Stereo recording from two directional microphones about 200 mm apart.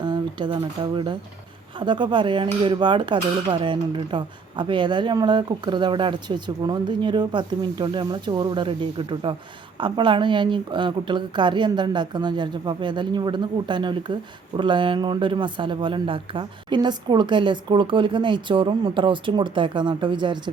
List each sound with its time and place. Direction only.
0.0 s a woman's voice: 20° right (ahead or behind)